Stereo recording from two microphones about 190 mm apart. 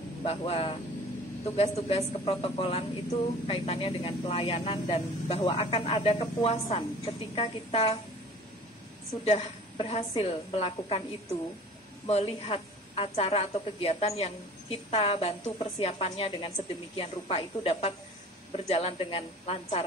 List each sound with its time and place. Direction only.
0.2 s a woman's voice: 30° left (ahead or behind)
9.2 s a woman's voice: 30° left (ahead or behind)
12.1 s a woman's voice: 30° left (ahead or behind)